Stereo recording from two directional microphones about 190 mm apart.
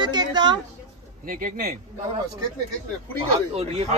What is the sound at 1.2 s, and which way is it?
Speech, 45° right (ahead or behind).